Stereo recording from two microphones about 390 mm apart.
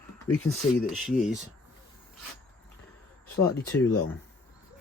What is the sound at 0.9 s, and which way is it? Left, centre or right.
Speech, centre.